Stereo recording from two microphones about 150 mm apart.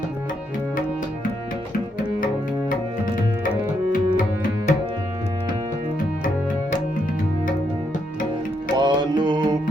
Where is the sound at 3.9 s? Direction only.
65° left (ahead or behind).